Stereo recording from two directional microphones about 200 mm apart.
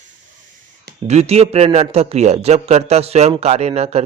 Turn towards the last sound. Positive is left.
turn(degrees=-30)  # may be behind; listen again after turning